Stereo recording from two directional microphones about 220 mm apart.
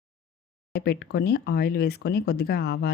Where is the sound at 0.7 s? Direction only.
45° left (ahead or behind).